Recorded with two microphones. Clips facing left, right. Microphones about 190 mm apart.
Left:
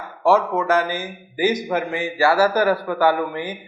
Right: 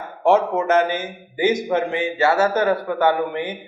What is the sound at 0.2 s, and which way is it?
A man's voice, 25° right (ahead or behind).